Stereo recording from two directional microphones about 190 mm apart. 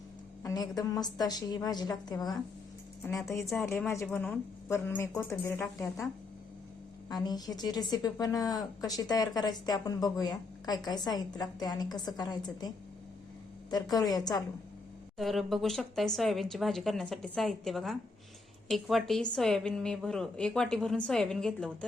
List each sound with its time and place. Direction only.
0.4 s a woman's voice: 20° left (ahead or behind)
3.2 s a woman's voice: centre (ahead or behind)
3.7 s speech: 15° left (ahead or behind)
5.6 s a woman's voice: centre (ahead or behind)
7.1 s a woman's voice: 20° left (ahead or behind)
15.2 s a woman's voice: centre (ahead or behind)